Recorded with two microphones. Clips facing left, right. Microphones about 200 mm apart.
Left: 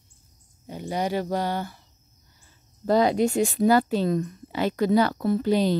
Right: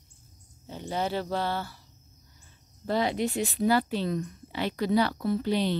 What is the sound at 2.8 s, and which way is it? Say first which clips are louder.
Speech: left 7 dB; 45° left (ahead or behind).